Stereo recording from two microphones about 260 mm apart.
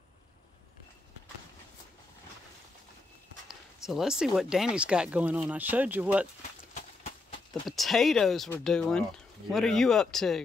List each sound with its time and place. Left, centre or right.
3.4 s speech: centre
6.7 s horse: left
7.6 s speech: centre